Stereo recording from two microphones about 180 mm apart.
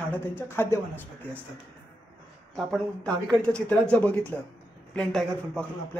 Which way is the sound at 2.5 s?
5° left (ahead or behind).